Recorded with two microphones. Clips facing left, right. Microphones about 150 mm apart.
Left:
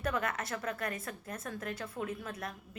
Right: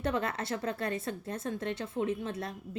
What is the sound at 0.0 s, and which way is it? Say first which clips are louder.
A woman's voice: right 3 dB; 30° right (ahead or behind).